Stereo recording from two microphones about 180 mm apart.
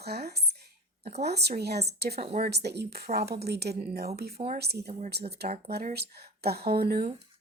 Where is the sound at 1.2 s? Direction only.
65° right (ahead or behind).